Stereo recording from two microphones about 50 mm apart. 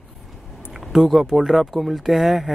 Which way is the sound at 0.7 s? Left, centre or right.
Centre.